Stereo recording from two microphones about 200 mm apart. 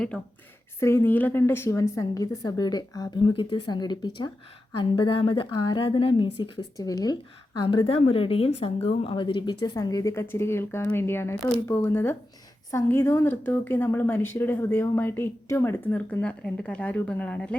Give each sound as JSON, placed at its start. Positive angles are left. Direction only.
{"t": 0.8, "sound": "a woman's voice", "side_deg": 10}